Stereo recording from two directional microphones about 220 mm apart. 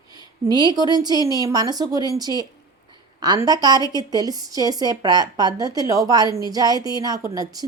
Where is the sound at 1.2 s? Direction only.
15° left (ahead or behind).